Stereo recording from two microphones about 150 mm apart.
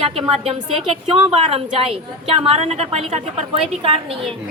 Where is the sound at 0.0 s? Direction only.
40° right (ahead or behind).